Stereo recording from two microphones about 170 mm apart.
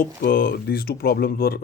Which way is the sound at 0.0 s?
60° left (ahead or behind).